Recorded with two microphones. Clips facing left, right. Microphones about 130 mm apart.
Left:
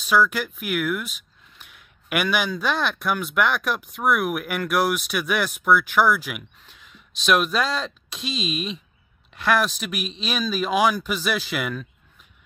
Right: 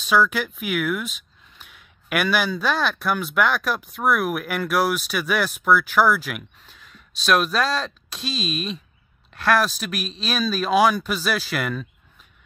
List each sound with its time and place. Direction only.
0.0 s speech: 10° left (ahead or behind)
1.7 s a sound: 10° left (ahead or behind)
2.6 s speech: 15° left (ahead or behind)
9.8 s speech: 15° left (ahead or behind)